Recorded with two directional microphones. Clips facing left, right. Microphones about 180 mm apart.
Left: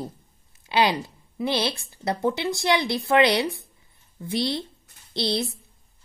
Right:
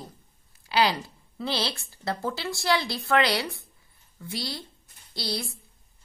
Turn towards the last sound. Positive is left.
turn(degrees=25)  # may be behind; listen again after turning